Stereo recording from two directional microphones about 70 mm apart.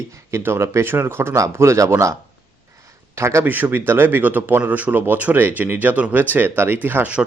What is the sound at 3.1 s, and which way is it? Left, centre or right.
Speech, right.